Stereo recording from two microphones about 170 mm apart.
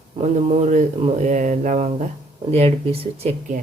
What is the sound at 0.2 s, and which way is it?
Speech, 45° right (ahead or behind).